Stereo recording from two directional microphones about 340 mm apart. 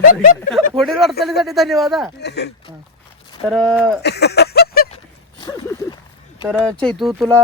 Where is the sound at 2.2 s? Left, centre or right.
Left.